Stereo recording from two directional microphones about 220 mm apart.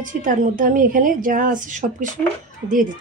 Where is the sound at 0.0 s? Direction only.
35° right (ahead or behind).